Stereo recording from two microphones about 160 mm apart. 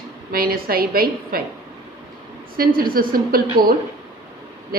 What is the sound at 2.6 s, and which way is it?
Speech, 65° right (ahead or behind).